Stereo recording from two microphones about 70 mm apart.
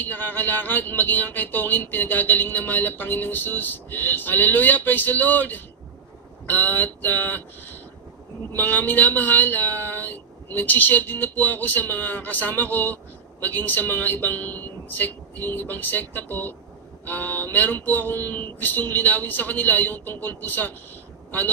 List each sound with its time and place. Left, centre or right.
0.0 s speech: left